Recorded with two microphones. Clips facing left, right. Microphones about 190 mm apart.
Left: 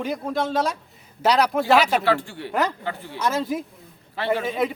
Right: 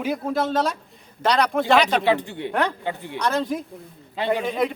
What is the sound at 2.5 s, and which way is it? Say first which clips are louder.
Speech: even; 5° left (ahead or behind).